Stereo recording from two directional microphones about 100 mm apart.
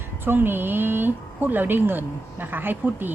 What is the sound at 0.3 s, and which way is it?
Speech, 20° right (ahead or behind).